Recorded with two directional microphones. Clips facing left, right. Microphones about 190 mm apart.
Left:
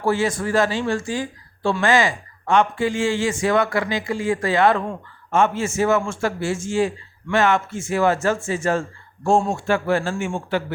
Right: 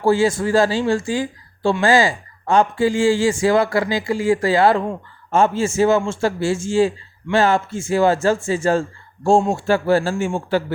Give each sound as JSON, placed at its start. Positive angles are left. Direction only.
{"t": 0.0, "sound": "a man's voice", "side_deg": -30}